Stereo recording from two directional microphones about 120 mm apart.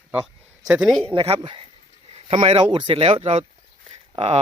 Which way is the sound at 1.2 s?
45° right (ahead or behind).